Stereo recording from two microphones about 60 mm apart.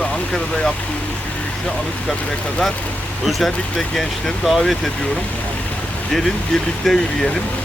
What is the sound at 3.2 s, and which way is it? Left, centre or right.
Speech, centre.